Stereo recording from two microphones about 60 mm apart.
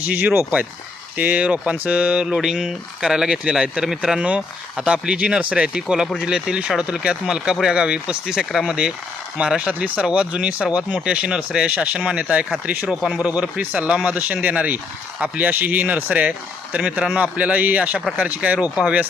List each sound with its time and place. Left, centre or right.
0.0 s speech: right
2.2 s speech: centre
4.2 s speech: centre
9.4 s speech: centre
13.0 s speech: centre
13.2 s speech: centre